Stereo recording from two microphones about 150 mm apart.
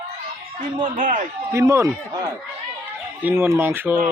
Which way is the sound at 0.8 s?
60° right (ahead or behind).